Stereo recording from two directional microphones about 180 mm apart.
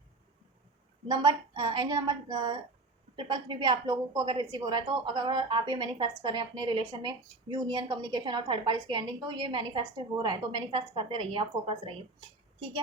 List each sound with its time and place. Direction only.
1.0 s a woman's voice: 25° right (ahead or behind)